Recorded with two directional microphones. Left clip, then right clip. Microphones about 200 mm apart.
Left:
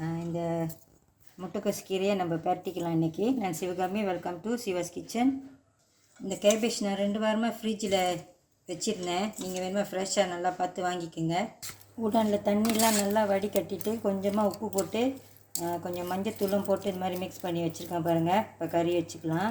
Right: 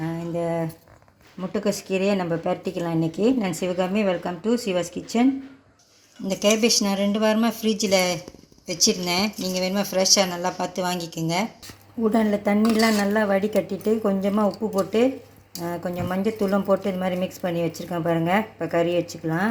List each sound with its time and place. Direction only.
0.1 s a sound: 30° right (ahead or behind)
1.4 s a woman's voice: 20° right (ahead or behind)
6.2 s speech: 30° right (ahead or behind)
12.1 s a woman's voice: 20° right (ahead or behind)